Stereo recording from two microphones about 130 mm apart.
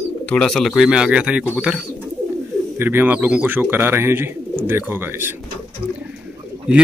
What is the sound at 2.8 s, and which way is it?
Speech, 15° right (ahead or behind).